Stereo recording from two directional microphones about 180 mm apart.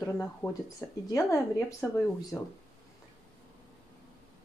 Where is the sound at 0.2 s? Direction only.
15° left (ahead or behind).